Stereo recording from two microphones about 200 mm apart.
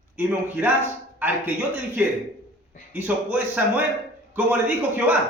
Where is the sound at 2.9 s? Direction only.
10° right (ahead or behind).